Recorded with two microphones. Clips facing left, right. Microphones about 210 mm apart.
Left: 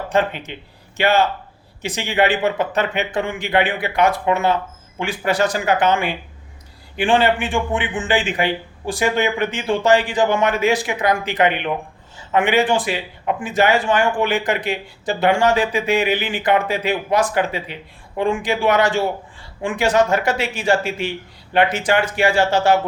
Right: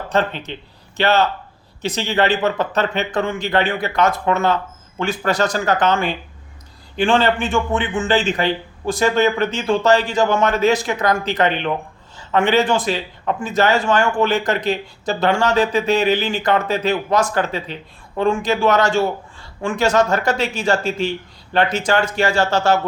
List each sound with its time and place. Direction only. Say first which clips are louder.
0.1 s a man's voice: even; 10° left (ahead or behind)